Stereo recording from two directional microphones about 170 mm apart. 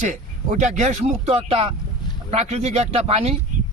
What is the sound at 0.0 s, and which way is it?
A man's voice, 45° right (ahead or behind).